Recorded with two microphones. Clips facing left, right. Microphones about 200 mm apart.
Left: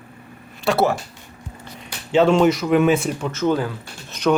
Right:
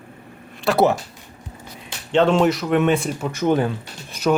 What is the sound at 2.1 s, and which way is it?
Speech, 5° left (ahead or behind).